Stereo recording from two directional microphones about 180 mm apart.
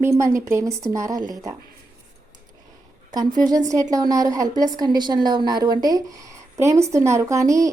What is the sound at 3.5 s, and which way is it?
A woman's voice, 20° right (ahead or behind).